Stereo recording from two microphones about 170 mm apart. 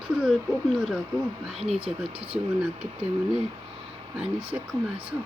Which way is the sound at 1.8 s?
35° right (ahead or behind).